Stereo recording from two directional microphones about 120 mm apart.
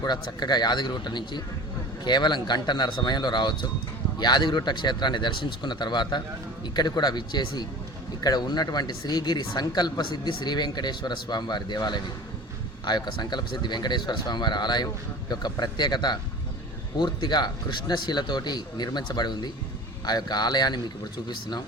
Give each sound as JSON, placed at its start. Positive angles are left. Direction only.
{"t": 0.0, "sound": "speech", "side_deg": 35}